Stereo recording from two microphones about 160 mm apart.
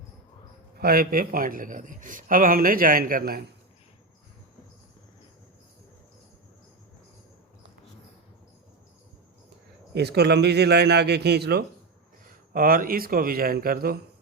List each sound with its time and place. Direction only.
0.8 s a man's voice: 70° right (ahead or behind)
9.9 s speech: 90° right
12.5 s speech: 65° right (ahead or behind)